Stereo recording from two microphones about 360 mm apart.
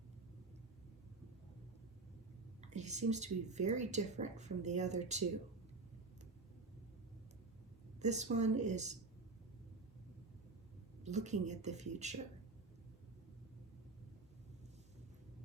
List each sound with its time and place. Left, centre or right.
2.6 s speech: centre
7.9 s speech: centre
11.0 s speech: centre